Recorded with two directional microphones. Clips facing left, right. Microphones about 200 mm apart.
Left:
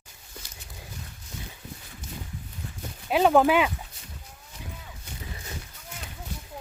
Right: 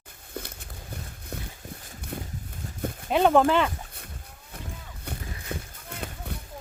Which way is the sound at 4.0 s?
60° right (ahead or behind).